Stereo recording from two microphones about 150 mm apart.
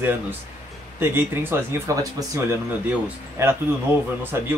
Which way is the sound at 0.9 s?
15° right (ahead or behind).